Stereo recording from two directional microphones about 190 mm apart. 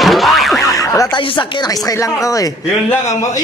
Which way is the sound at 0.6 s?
15° left (ahead or behind).